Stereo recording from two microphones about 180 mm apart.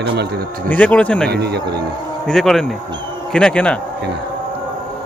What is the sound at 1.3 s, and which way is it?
Speech, 65° right (ahead or behind).